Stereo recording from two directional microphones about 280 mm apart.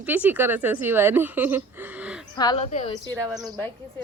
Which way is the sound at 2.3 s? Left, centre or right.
Centre.